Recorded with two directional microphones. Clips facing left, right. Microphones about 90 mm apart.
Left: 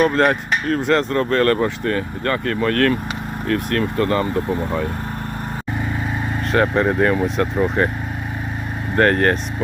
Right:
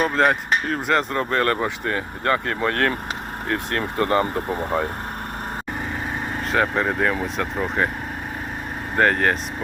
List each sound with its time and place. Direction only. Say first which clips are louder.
0.0 s speech: left 3 dB; centre (ahead or behind); by 4.0 s 25° right (ahead or behind)
4.0 s speech: right 2 dB; 35° right (ahead or behind)
6.5 s speech: left 4 dB; centre (ahead or behind)
9.0 s speech: left 3 dB; 5° right (ahead or behind)